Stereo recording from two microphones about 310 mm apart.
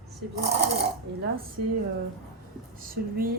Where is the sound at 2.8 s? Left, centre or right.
Right.